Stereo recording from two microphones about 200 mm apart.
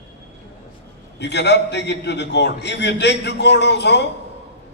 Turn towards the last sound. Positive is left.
turn(degrees=60)  # may be behind; listen again after turning